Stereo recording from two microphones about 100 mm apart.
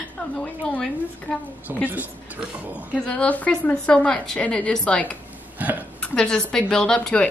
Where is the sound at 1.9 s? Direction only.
15° right (ahead or behind).